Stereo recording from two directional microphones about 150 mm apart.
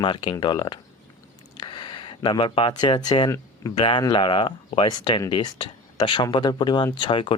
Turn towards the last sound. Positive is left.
turn(degrees=35)  # may be behind; listen again after turning